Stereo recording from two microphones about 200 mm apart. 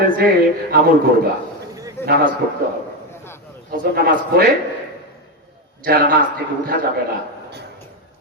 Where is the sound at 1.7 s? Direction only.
15° right (ahead or behind).